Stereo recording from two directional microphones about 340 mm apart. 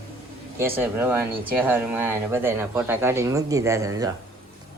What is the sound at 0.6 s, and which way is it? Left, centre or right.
Speech, centre.